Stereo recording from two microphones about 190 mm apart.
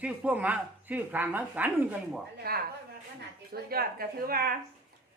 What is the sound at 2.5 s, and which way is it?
Speech, 55° right (ahead or behind).